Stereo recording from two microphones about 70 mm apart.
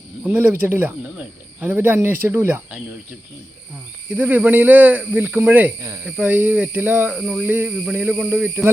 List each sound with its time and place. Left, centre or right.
0.3 s speech: right
1.0 s cricket: centre
1.7 s speech: right
4.1 s speech: right
6.1 s a sound: centre
6.3 s speech: right
7.1 s a sound: centre
7.4 s speech: right